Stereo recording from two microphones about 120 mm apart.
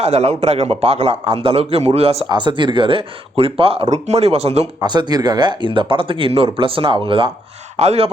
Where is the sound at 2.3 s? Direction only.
40° right (ahead or behind).